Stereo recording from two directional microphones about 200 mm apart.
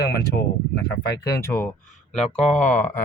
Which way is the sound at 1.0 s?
60° left (ahead or behind).